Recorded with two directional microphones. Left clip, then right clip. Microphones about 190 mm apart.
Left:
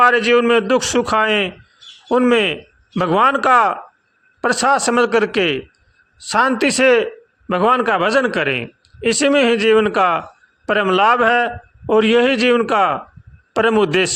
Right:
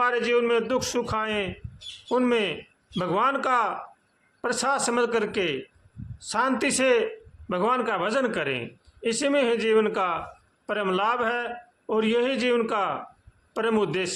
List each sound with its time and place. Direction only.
0.0 s a man's voice: 40° left (ahead or behind)